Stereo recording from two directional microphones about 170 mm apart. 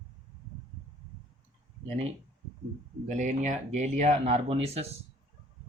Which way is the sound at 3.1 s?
45° right (ahead or behind).